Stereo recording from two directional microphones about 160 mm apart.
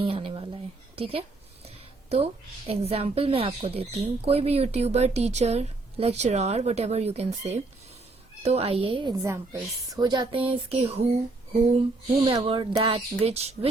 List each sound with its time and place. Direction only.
0.0 s a sound: 35° right (ahead or behind)
1.6 s a woman's voice: 40° right (ahead or behind)
9.1 s a woman's voice: 20° right (ahead or behind); by 13.7 s 40° right (ahead or behind)